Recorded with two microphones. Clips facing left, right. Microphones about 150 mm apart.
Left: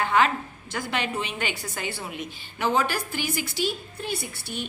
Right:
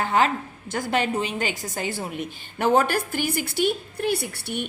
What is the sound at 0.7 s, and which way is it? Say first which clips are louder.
A woman's voice: right 5 dB; 45° right (ahead or behind).